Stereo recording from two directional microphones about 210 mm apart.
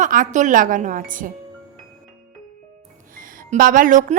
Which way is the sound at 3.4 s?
40° right (ahead or behind).